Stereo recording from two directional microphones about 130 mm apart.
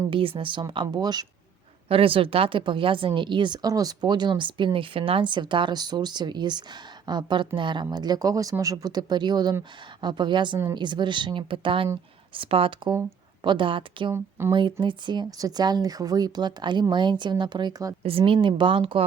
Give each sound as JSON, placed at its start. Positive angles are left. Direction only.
{"t": 0.1, "sound": "a woman's voice", "side_deg": -45}
{"t": 1.9, "sound": "a woman's voice", "side_deg": -45}
{"t": 12.9, "sound": "speech", "side_deg": -35}
{"t": 14.1, "sound": "speech", "side_deg": -20}
{"t": 14.5, "sound": "a woman's voice", "side_deg": -40}
{"t": 18.0, "sound": "a woman's voice", "side_deg": -45}